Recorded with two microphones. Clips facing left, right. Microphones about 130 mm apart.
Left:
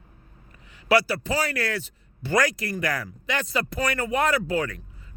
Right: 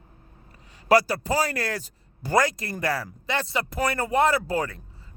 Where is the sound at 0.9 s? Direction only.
40° right (ahead or behind).